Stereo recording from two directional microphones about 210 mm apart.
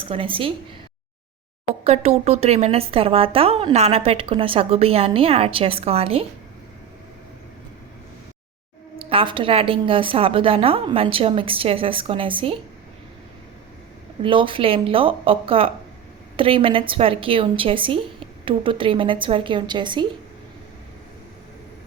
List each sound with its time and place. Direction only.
0.0 s speech: 25° right (ahead or behind)
1.6 s speech: 30° right (ahead or behind)
9.0 s speech: 25° right (ahead or behind)
14.2 s speech: 25° right (ahead or behind)